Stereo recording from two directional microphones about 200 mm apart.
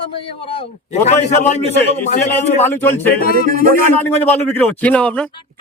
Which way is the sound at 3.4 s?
45° right (ahead or behind).